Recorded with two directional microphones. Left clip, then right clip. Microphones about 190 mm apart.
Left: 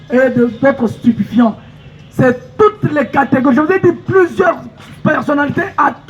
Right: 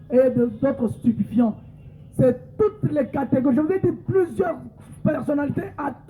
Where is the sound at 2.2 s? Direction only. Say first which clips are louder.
Left 9 dB; 40° left (ahead or behind).